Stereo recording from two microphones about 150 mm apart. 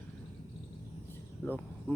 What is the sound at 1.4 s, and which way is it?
Cricket, 10° left (ahead or behind).